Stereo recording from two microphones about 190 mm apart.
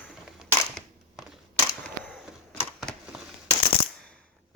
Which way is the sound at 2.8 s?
Centre (ahead or behind).